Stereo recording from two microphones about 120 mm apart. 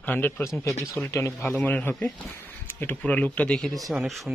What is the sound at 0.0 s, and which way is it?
Speech, 15° left (ahead or behind).